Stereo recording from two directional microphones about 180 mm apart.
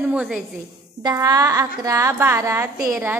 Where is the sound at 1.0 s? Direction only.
20° right (ahead or behind).